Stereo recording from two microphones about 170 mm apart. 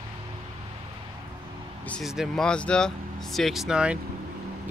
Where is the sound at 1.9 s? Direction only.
Centre (ahead or behind).